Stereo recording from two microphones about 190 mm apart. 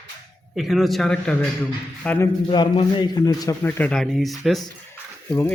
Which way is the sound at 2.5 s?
25° left (ahead or behind).